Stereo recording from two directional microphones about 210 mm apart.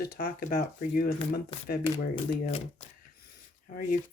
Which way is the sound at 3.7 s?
40° left (ahead or behind).